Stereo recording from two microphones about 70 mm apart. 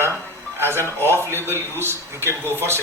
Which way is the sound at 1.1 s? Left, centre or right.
Right.